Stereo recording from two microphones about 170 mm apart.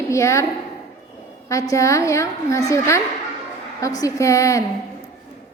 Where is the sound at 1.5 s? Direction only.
20° left (ahead or behind).